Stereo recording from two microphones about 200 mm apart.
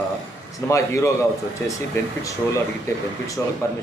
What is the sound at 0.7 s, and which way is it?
Speech, 15° left (ahead or behind).